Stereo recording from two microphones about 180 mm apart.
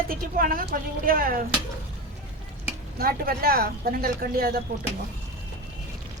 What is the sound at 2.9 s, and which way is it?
Speech, 55° right (ahead or behind).